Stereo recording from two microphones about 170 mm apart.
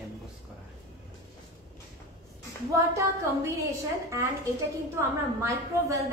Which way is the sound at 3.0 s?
15° right (ahead or behind).